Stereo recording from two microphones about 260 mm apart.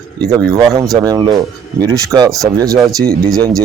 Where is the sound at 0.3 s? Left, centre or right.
Centre.